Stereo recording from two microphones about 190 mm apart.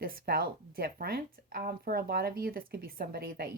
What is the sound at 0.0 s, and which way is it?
Speech, 55° right (ahead or behind).